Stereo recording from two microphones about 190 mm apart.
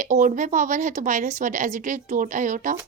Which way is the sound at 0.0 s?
40° right (ahead or behind).